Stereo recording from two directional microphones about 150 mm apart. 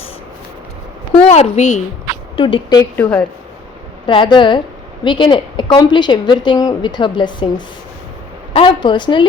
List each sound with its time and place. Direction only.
1.2 s a woman's voice: 45° left (ahead or behind)
2.3 s a woman's voice: 35° left (ahead or behind)
2.9 s a woman's voice: 10° left (ahead or behind)
4.0 s a woman's voice: 30° left (ahead or behind)